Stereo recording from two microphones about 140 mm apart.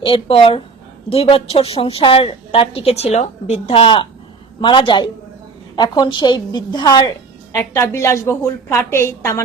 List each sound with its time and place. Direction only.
0.0 s a woman's voice: 40° left (ahead or behind); by 9.4 s 20° left (ahead or behind)